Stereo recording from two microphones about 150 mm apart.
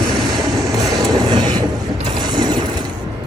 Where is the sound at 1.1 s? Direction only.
30° right (ahead or behind).